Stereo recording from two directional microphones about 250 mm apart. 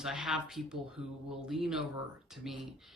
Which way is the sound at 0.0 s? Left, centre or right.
Centre.